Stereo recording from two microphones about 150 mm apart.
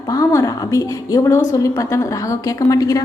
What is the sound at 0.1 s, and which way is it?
A woman's voice, 20° left (ahead or behind).